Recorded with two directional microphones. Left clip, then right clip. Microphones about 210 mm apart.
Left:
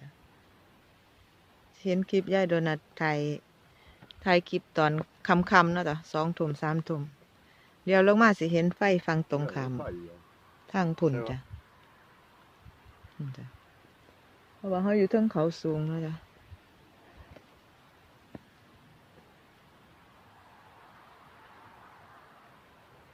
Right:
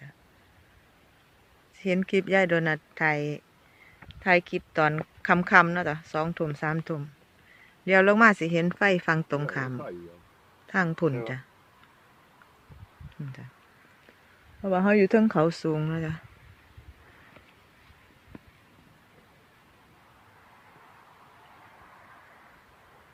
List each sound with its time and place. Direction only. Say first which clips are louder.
1.8 s a woman's voice: right 2 dB; 5° right (ahead or behind)
14.6 s speech: right 5 dB; 15° right (ahead or behind)